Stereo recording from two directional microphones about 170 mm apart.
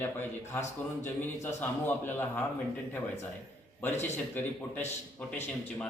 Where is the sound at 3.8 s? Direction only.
10° left (ahead or behind).